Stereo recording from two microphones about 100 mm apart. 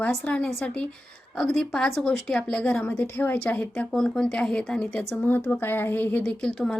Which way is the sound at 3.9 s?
5° left (ahead or behind).